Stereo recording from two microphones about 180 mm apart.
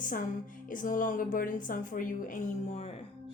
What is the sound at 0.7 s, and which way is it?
A woman's voice, 50° left (ahead or behind).